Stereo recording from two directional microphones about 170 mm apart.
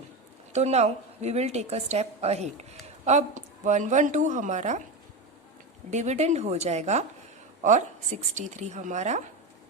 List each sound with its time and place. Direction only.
0.5 s a woman's voice: 40° right (ahead or behind)
5.9 s a woman's voice: 40° right (ahead or behind)